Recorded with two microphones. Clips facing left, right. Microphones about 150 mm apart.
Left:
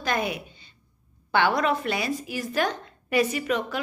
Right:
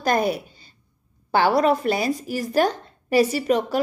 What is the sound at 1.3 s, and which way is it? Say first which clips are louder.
A woman's voice: right 5 dB; 35° right (ahead or behind).